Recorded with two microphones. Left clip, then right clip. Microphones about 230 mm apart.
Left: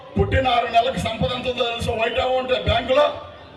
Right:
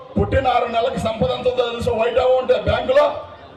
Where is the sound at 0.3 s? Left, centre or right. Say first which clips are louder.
Right 2 dB; left.